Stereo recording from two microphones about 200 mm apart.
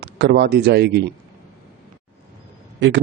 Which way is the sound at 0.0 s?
55° right (ahead or behind).